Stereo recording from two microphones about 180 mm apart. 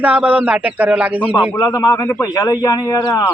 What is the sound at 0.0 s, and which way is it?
A man's voice, 5° right (ahead or behind).